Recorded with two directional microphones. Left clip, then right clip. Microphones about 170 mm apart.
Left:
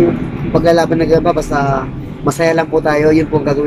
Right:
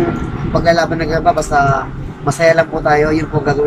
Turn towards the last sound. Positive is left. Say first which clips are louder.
# left 2 dB
turn(degrees=15)  # may be behind; listen again after turning